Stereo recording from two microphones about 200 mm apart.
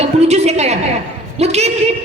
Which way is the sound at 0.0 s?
35° right (ahead or behind).